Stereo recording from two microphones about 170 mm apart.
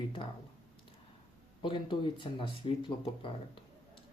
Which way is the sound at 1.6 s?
30° left (ahead or behind).